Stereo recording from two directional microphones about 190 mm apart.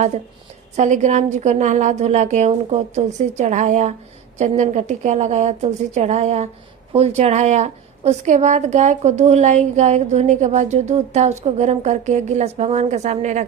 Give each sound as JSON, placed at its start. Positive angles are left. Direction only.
{"t": 0.8, "sound": "a woman's voice", "side_deg": -40}